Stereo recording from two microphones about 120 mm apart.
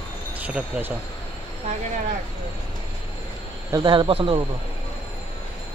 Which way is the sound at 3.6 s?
35° right (ahead or behind).